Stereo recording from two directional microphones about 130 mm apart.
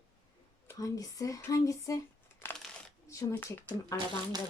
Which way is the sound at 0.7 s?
25° left (ahead or behind).